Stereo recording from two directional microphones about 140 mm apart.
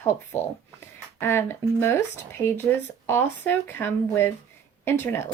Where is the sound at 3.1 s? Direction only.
15° left (ahead or behind).